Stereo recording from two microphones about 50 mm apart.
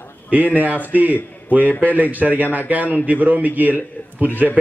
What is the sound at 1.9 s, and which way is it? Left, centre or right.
A man's voice, right.